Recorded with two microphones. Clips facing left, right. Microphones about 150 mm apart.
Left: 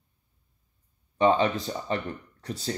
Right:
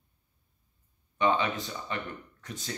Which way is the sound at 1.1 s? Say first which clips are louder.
Left 5 dB; 35° left (ahead or behind).